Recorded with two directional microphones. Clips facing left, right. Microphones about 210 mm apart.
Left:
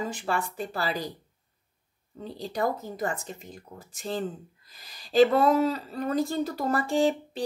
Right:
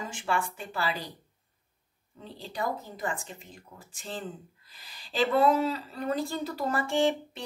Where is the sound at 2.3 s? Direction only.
40° left (ahead or behind).